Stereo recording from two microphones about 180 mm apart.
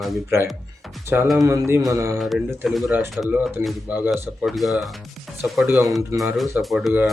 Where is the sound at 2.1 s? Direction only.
Centre (ahead or behind).